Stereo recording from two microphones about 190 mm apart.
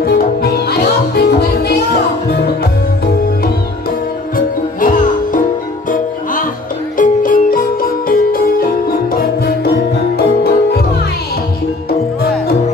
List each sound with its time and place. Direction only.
0.0 s music: 55° left (ahead or behind)
4.7 s music: 45° left (ahead or behind)
7.0 s music: 45° left (ahead or behind)